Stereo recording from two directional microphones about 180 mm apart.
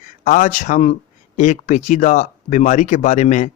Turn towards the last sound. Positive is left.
turn(degrees=45)  # may be behind; listen again after turning